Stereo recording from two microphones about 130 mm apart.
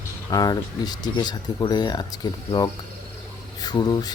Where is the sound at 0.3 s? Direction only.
30° left (ahead or behind).